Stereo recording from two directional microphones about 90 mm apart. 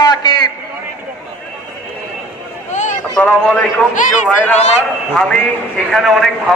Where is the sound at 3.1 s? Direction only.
15° left (ahead or behind).